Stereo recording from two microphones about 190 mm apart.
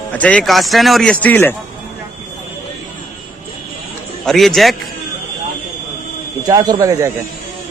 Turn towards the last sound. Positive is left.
turn(degrees=-15)  # may be behind; listen again after turning